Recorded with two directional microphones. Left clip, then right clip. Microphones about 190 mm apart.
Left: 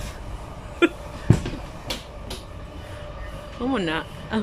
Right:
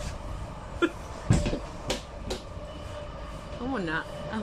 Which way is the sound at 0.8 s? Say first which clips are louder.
Left 7 dB; 5° left (ahead or behind).